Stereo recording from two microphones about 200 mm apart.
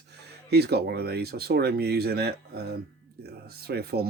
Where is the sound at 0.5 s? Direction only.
55° right (ahead or behind).